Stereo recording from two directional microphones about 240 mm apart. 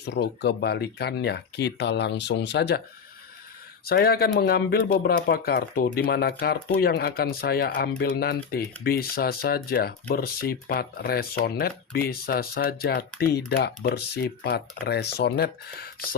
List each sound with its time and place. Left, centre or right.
0.0 s speech: left
3.8 s speech: left